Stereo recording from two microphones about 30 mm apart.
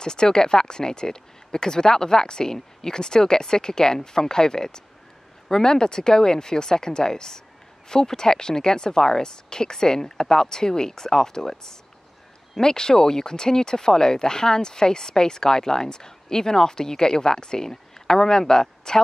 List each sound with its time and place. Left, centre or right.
0.0 s speech: left